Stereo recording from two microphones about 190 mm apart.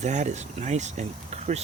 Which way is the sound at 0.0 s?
40° right (ahead or behind).